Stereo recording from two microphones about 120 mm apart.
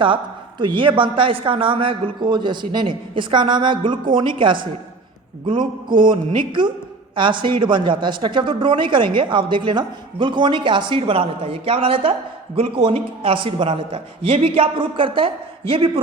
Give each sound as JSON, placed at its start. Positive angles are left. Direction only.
{"t": 0.6, "sound": "speech", "side_deg": -45}
{"t": 6.1, "sound": "a woman's voice", "side_deg": -40}